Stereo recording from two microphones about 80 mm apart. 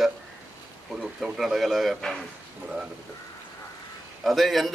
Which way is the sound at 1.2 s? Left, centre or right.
Centre.